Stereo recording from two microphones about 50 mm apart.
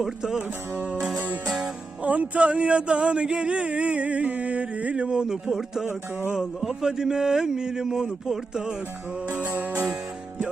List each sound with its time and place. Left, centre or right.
0.0 s speech: centre
0.8 s music: right
2.0 s speech: right
9.3 s music: right